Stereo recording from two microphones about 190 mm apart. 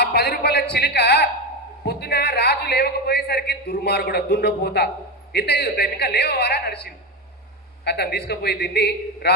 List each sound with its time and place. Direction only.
0.0 s a man's voice: 60° left (ahead or behind)